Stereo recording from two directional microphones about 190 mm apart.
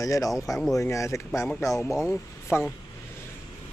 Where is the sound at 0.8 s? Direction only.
15° left (ahead or behind).